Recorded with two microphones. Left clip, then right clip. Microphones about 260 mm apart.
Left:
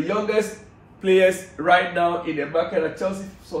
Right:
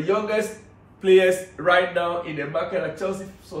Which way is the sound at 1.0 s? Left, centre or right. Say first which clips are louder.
Right 1 dB; centre.